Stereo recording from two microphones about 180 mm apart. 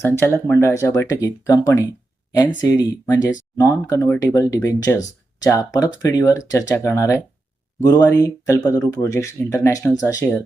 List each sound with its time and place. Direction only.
0.0 s speech: 10° left (ahead or behind)
1.9 s a sound: 20° left (ahead or behind)
2.6 s speech: 20° left (ahead or behind)